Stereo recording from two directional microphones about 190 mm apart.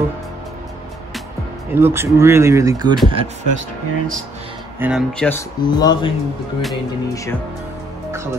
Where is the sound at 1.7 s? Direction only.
10° right (ahead or behind).